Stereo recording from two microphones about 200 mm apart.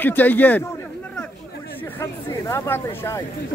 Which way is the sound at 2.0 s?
10° left (ahead or behind).